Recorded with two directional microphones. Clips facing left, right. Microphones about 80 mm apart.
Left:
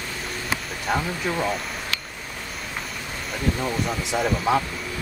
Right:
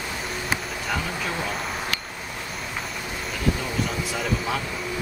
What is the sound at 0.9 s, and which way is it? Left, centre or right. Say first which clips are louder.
Speech: left 4 dB; left.